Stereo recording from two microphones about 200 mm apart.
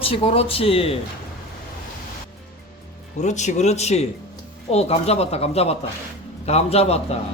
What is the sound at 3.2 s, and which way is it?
Speech, 35° left (ahead or behind).